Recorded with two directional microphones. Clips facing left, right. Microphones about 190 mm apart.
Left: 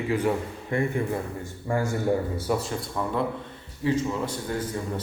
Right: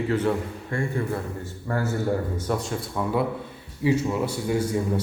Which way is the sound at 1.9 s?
10° left (ahead or behind).